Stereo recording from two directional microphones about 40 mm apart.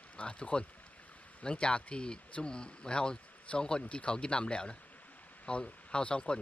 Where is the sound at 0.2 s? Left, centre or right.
Left.